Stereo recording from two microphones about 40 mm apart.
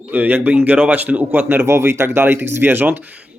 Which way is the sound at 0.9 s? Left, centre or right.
Right.